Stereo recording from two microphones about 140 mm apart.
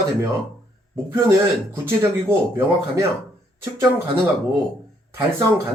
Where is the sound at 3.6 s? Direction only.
20° right (ahead or behind).